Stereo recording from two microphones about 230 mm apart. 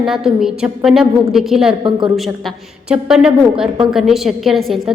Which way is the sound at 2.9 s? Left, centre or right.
Centre.